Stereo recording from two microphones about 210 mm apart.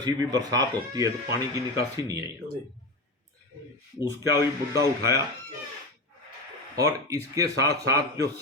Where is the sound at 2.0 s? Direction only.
15° right (ahead or behind).